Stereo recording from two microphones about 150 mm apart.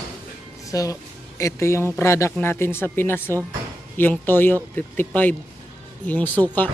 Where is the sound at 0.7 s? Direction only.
25° left (ahead or behind).